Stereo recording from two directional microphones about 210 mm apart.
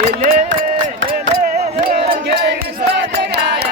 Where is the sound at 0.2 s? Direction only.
40° right (ahead or behind).